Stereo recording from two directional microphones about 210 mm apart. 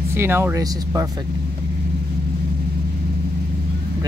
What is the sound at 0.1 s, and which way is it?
Speech, 10° right (ahead or behind).